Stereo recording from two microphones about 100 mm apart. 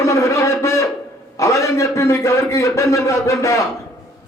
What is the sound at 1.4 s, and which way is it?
A man's voice, 30° left (ahead or behind).